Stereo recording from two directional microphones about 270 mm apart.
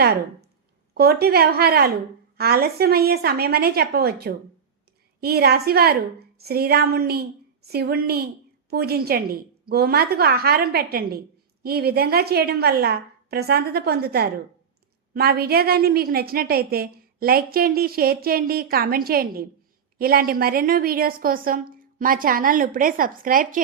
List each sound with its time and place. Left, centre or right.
0.9 s a woman's voice: right